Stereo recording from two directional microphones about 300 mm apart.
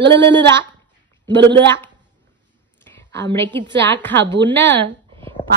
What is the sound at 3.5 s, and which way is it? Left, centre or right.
Speech, centre.